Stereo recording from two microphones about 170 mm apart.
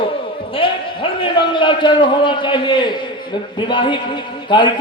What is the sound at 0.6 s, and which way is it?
A man's voice, 30° left (ahead or behind).